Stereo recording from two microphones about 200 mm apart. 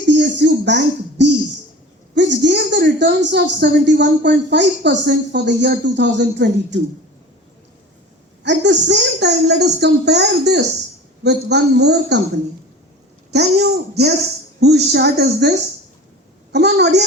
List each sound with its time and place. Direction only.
0.1 s a sound: 60° right (ahead or behind)
2.1 s a woman's voice: 60° right (ahead or behind)
8.4 s a woman's voice: 60° right (ahead or behind)
13.3 s a child's voice: 55° right (ahead or behind)